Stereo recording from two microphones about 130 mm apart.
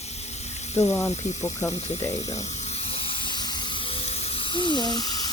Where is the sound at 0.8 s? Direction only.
15° left (ahead or behind).